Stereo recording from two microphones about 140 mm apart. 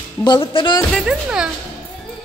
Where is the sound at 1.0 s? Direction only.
5° right (ahead or behind).